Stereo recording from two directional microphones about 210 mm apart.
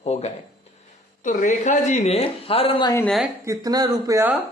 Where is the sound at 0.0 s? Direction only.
30° left (ahead or behind).